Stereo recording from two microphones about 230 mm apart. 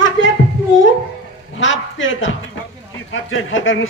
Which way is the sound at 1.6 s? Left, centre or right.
Left.